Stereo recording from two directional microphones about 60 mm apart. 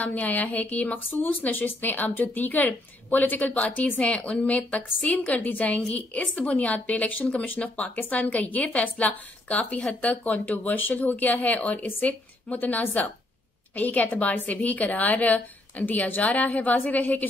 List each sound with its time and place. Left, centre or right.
0.0 s speech: left